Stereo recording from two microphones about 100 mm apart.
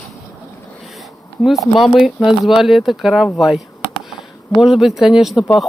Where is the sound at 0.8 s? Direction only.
Centre (ahead or behind).